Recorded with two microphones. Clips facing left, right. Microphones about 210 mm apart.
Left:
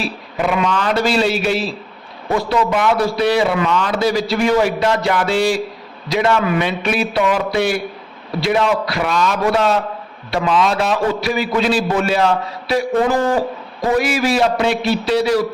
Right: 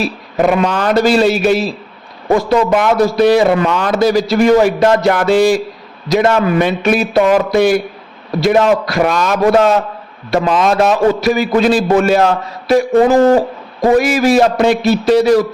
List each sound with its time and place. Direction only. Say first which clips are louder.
0.0 s a man's voice: right 7 dB; 45° right (ahead or behind)
13.8 s a man's voice: right 6 dB; 45° right (ahead or behind)